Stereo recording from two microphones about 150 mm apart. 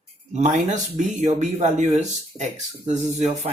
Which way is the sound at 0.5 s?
55° right (ahead or behind).